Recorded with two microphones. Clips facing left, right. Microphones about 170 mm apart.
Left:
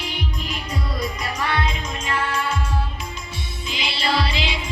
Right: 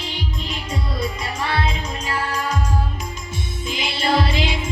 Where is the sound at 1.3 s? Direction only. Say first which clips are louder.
Right 1 dB; 30° right (ahead or behind).